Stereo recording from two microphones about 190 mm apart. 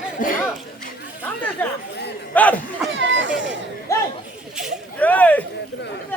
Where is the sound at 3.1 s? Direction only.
70° right (ahead or behind).